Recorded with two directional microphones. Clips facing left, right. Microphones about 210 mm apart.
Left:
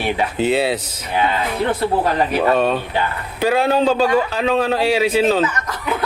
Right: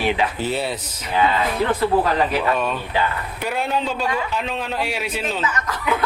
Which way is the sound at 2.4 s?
35° left (ahead or behind).